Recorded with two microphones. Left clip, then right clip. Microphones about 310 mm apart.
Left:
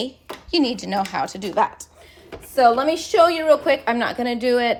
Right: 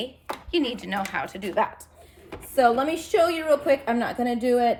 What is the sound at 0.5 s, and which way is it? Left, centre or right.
Speech, centre.